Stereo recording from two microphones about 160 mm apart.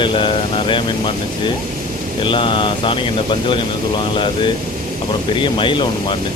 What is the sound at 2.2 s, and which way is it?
Speech, 30° left (ahead or behind).